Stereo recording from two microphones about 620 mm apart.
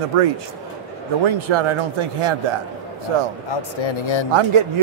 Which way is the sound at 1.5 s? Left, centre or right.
Right.